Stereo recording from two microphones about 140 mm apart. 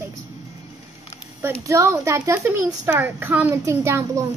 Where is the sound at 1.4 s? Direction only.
20° right (ahead or behind).